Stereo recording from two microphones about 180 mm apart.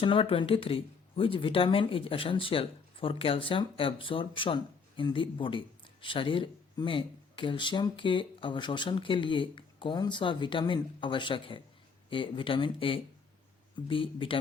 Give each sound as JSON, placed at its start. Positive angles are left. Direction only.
{"t": 0.0, "sound": "speech", "side_deg": 30}